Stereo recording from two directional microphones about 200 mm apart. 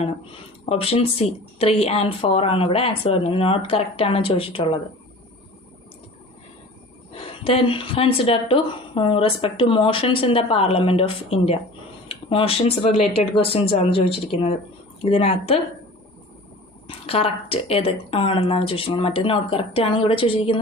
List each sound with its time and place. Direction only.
0.6 s a woman's voice: 30° left (ahead or behind)
7.1 s a woman's voice: 30° left (ahead or behind)
16.8 s a woman's voice: 30° left (ahead or behind)